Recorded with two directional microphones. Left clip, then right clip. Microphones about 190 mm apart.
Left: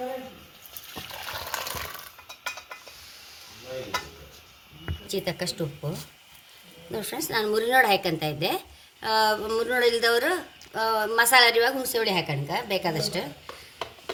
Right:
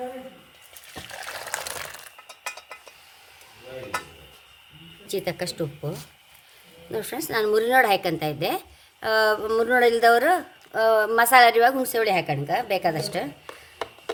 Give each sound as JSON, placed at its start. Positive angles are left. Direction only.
{"t": 5.0, "sound": "a woman's voice", "side_deg": -40}
{"t": 6.9, "sound": "a woman's voice", "side_deg": -40}